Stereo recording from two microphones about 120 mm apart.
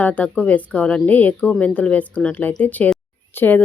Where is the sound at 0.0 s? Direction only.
10° left (ahead or behind).